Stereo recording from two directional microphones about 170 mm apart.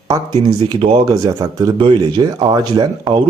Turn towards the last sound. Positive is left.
turn(degrees=-20)  # may be behind; listen again after turning